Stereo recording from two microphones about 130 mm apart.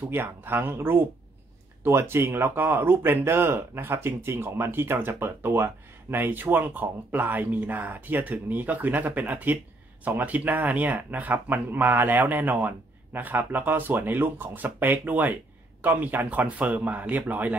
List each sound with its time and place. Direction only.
0.1 s speech: 20° right (ahead or behind)